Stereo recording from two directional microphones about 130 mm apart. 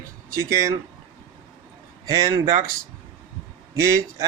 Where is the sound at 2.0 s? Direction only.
25° right (ahead or behind).